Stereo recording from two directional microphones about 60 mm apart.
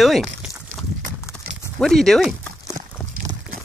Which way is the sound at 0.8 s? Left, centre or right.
Centre.